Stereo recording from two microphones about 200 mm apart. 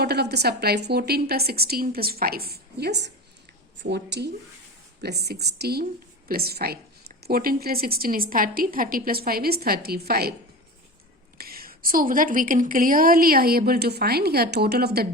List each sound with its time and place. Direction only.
0.0 s a woman's voice: 55° right (ahead or behind)
11.3 s a woman's voice: 50° right (ahead or behind)